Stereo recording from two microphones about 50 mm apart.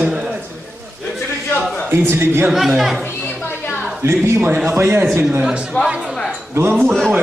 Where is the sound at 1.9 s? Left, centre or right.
Right.